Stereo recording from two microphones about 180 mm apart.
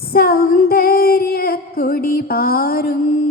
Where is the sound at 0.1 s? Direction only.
55° left (ahead or behind).